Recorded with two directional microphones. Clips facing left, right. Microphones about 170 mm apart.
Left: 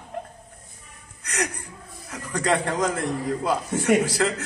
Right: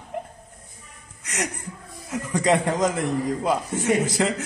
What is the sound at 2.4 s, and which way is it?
A man's voice, 20° right (ahead or behind).